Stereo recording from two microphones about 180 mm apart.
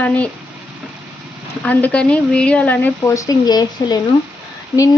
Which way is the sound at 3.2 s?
20° left (ahead or behind).